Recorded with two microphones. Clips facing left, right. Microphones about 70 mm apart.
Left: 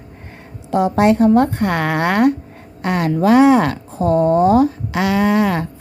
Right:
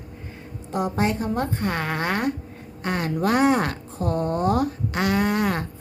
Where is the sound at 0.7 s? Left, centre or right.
Left.